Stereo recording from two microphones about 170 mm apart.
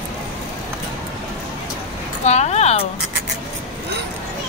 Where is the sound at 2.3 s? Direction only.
40° left (ahead or behind).